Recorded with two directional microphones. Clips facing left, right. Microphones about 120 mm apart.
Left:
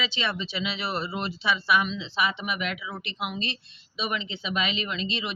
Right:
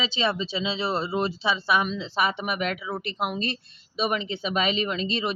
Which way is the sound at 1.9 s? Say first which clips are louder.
Right 2 dB; 40° right (ahead or behind).